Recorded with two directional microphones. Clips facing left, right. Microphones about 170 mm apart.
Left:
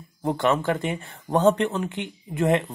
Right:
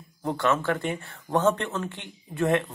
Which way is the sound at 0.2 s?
15° left (ahead or behind).